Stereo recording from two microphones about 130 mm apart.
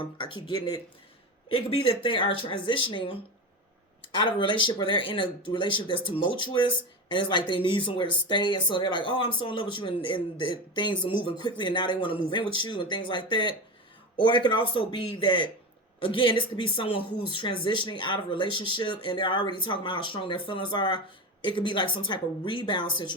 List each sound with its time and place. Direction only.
0.0 s speech: 40° left (ahead or behind)